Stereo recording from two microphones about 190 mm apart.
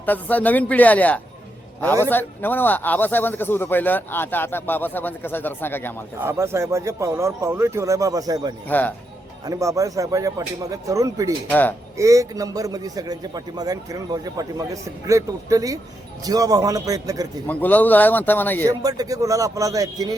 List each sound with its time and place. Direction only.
0.0 s speech: 10° left (ahead or behind)
6.1 s speech: 15° right (ahead or behind)
11.4 s speech: 10° left (ahead or behind)
11.9 s a man's voice: 15° right (ahead or behind)
17.4 s speech: 10° left (ahead or behind)
18.6 s a man's voice: 20° right (ahead or behind)